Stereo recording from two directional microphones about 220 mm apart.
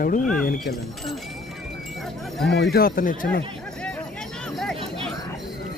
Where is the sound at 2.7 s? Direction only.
40° left (ahead or behind).